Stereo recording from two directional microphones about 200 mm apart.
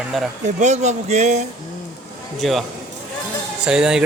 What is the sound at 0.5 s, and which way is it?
Speech, 35° right (ahead or behind).